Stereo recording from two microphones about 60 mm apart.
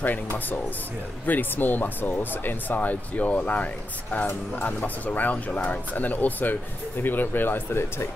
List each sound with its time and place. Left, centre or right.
1.2 s speech: left